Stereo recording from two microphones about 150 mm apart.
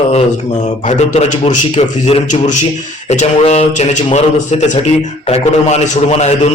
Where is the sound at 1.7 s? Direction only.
40° left (ahead or behind).